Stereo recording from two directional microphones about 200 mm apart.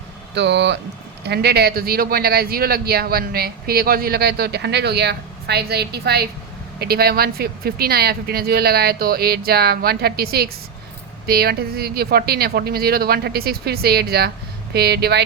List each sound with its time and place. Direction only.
0.3 s speech: 60° right (ahead or behind)